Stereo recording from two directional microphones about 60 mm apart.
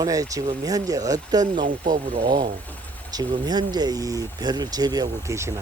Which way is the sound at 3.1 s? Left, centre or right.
Right.